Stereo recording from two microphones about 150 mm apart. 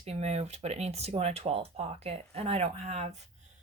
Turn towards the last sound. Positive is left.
turn(degrees=-45)  # may be behind; listen again after turning